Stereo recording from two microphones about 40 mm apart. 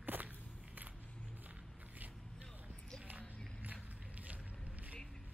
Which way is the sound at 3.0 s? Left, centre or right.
Right.